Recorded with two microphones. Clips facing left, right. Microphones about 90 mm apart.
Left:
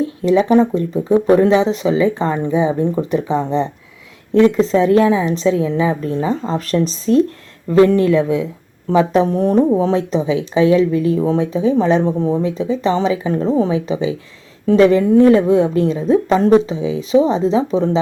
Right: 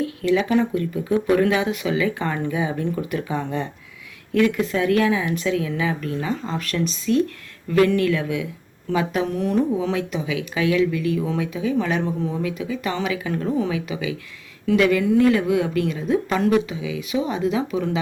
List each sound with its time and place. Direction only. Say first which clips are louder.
0.0 s speech: left 6 dB; 25° left (ahead or behind)